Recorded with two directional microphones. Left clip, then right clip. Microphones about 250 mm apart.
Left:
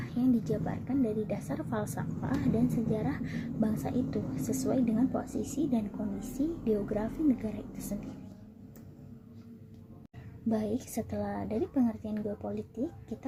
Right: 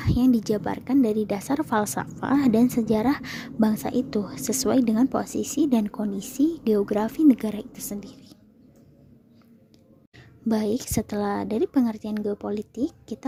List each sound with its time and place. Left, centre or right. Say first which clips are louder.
0.0 s a woman's voice: right 8 dB; right
10.5 s a woman's voice: right 8 dB; right